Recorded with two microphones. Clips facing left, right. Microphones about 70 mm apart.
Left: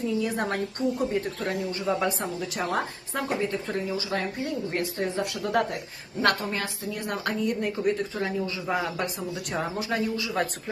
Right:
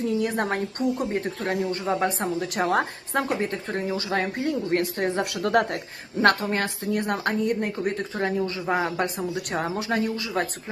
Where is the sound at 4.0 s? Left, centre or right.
Right.